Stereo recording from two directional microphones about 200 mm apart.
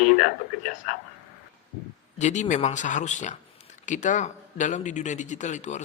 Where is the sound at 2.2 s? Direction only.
35° left (ahead or behind).